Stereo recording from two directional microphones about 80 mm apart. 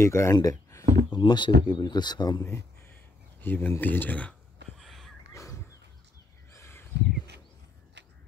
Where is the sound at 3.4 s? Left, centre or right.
Left.